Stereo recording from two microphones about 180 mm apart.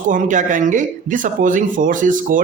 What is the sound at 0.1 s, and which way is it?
Speech, 45° right (ahead or behind).